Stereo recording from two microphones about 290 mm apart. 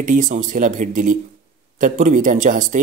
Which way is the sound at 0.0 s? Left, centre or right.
Right.